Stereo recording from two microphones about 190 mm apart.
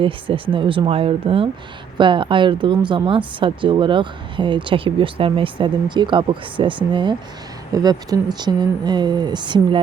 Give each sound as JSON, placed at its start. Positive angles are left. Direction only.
{"t": 0.0, "sound": "speech", "side_deg": -30}